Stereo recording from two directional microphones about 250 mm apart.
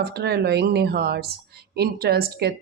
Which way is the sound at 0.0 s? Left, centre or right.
Right.